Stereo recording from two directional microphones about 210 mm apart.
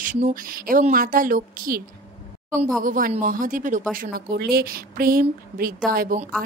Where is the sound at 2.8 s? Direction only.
40° right (ahead or behind).